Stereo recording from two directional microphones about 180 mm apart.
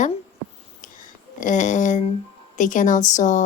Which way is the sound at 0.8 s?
45° left (ahead or behind).